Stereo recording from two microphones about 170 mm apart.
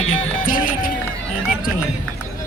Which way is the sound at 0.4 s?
55° left (ahead or behind).